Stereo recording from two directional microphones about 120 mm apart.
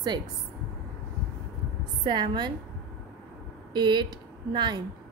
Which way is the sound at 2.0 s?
40° right (ahead or behind).